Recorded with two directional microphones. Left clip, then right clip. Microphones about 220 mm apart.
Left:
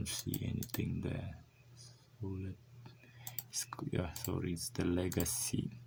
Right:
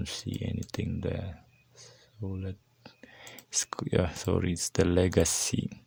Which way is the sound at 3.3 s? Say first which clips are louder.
Right 10 dB; 45° right (ahead or behind).